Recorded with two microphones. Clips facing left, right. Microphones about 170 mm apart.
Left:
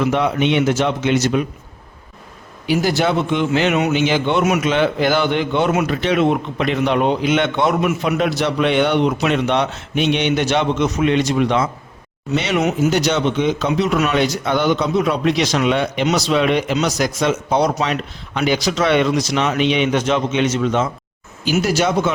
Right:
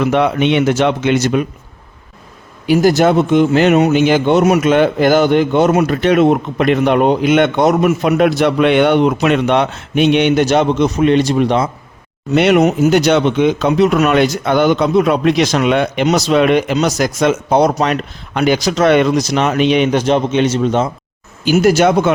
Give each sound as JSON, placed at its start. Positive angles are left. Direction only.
{"t": 0.0, "sound": "speech", "side_deg": -65}
{"t": 2.6, "sound": "speech", "side_deg": -45}
{"t": 12.3, "sound": "speech", "side_deg": -60}
{"t": 16.0, "sound": "speech", "side_deg": -45}
{"t": 21.5, "sound": "speech", "side_deg": -50}